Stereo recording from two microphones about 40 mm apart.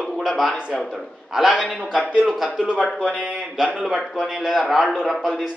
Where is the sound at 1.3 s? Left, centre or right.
Centre.